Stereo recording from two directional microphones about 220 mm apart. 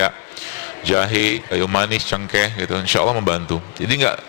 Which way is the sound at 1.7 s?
20° left (ahead or behind).